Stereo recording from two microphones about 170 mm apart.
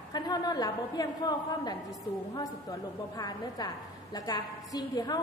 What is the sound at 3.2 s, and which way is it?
A woman's voice, 25° left (ahead or behind).